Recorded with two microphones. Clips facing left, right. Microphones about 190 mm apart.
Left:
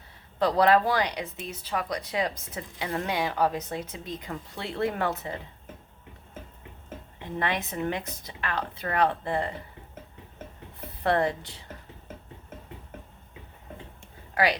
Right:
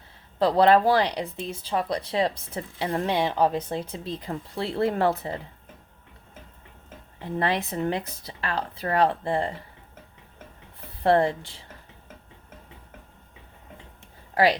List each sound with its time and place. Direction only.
0.3 s a woman's voice: 30° right (ahead or behind)
7.3 s a woman's voice: 30° right (ahead or behind)
11.0 s speech: 30° right (ahead or behind)
14.3 s a woman's voice: 30° right (ahead or behind)